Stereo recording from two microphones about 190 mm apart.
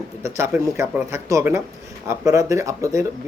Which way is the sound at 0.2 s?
15° right (ahead or behind).